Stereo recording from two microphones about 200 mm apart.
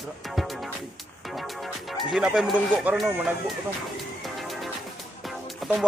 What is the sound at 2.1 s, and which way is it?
Speech, 5° right (ahead or behind).